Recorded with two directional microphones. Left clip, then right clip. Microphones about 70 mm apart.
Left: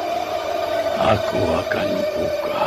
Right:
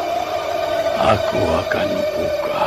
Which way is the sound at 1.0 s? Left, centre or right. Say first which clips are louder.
Right 2 dB; centre.